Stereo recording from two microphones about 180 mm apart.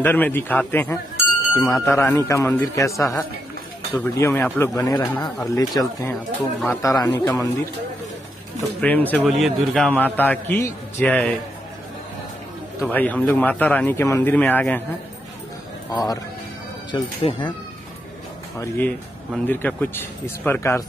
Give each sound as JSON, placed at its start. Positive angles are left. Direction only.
{"t": 0.0, "sound": "speech", "side_deg": 10}
{"t": 1.7, "sound": "speech", "side_deg": 0}
{"t": 2.0, "sound": "speech", "side_deg": 15}
{"t": 8.8, "sound": "speech", "side_deg": 10}
{"t": 12.8, "sound": "speech", "side_deg": 10}
{"t": 15.9, "sound": "speech", "side_deg": 20}
{"t": 18.6, "sound": "speech", "side_deg": 10}